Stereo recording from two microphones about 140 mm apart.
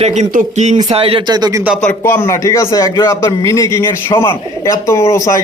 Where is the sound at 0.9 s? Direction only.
45° right (ahead or behind).